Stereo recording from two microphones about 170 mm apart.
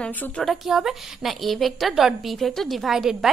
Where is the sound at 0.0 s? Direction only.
10° left (ahead or behind).